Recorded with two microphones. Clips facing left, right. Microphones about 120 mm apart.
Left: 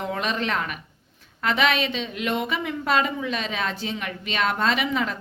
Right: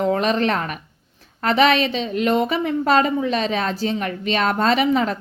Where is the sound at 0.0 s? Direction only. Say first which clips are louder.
Right 8 dB; 40° right (ahead or behind).